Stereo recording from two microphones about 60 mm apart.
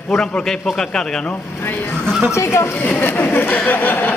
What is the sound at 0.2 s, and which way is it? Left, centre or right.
Speech, centre.